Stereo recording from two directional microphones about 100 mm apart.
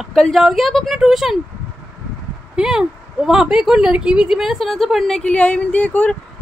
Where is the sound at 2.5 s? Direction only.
5° right (ahead or behind); by 6.1 s 15° left (ahead or behind).